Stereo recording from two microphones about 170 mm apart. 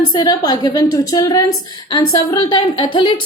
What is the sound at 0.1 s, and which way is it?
A woman's voice, 25° left (ahead or behind).